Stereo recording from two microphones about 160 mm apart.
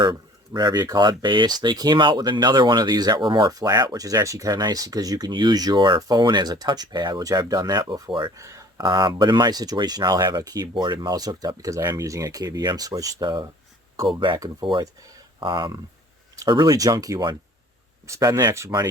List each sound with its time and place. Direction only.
0.0 s speech: 30° right (ahead or behind)